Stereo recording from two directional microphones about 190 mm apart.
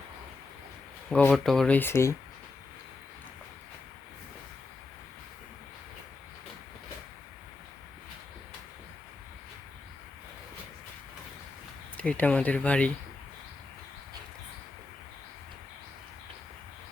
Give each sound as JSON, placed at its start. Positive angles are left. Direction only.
{"t": 1.3, "sound": "speech", "side_deg": 0}
{"t": 11.9, "sound": "speech", "side_deg": 5}